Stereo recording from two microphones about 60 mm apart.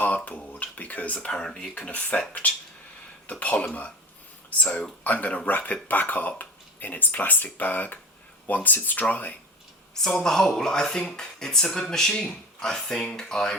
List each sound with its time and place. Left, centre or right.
0.3 s speech: left
1.3 s speech: centre
1.7 s speech: left
9.9 s speech: centre